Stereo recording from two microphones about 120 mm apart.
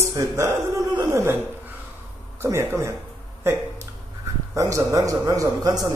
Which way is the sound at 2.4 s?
20° right (ahead or behind).